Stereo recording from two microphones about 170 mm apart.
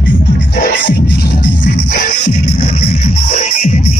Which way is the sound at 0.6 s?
55° left (ahead or behind).